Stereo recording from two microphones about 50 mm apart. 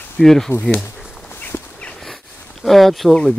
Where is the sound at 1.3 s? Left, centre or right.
Left.